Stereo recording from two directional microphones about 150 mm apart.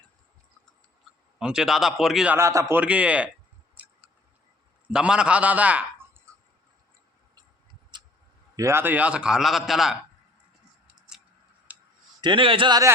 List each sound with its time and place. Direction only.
1.4 s a man's voice: 5° right (ahead or behind)
2.4 s a man's voice: 20° right (ahead or behind)
3.8 s a sound: 10° right (ahead or behind)
4.9 s a man's voice: 5° right (ahead or behind)
7.9 s tick: 30° right (ahead or behind)
8.5 s a man's voice: 20° right (ahead or behind); by 9.9 s centre (ahead or behind)
11.7 s a sound: 10° right (ahead or behind)
12.2 s a man's voice: 35° right (ahead or behind)